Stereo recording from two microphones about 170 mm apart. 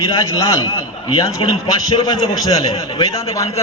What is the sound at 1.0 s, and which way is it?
A man's voice, 30° left (ahead or behind).